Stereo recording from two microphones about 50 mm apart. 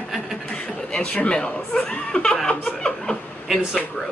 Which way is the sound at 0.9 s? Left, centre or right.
Centre.